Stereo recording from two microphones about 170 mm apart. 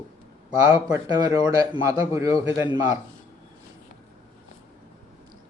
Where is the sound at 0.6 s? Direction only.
20° right (ahead or behind).